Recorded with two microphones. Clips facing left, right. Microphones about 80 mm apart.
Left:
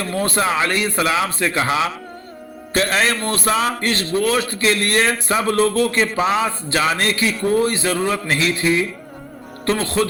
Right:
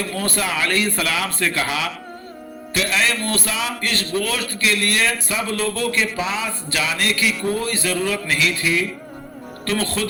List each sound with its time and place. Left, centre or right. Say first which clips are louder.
0.1 s a man's voice: left 4 dB; left
2.7 s a man's voice: left 3 dB; left
10.0 s a man's voice: left 5 dB; left